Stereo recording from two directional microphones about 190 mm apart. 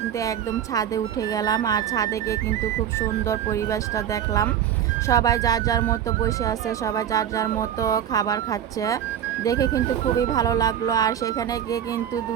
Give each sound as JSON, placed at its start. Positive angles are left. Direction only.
{"t": 0.2, "sound": "speech", "side_deg": 20}
{"t": 3.5, "sound": "speech", "side_deg": 15}